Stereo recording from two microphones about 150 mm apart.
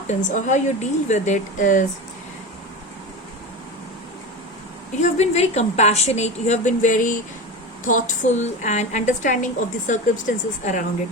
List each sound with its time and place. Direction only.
0.1 s a woman's voice: 55° left (ahead or behind)
4.9 s a woman's voice: 45° left (ahead or behind)